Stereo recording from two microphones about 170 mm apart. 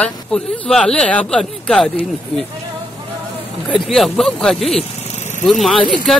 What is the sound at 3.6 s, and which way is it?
Speech, centre (ahead or behind).